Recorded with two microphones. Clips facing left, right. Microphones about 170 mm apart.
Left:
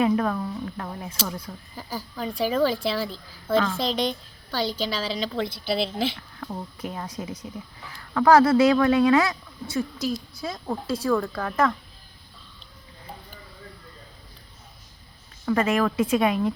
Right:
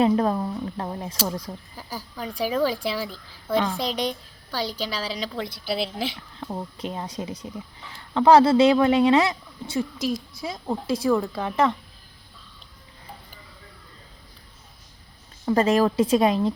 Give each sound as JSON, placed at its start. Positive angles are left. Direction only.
{"t": 0.0, "sound": "speech", "side_deg": -30}
{"t": 1.7, "sound": "a woman's voice", "side_deg": -10}
{"t": 6.4, "sound": "a woman's voice", "side_deg": -25}
{"t": 15.4, "sound": "a woman's voice", "side_deg": -35}